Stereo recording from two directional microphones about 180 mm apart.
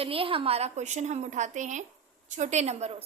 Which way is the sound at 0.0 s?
30° right (ahead or behind).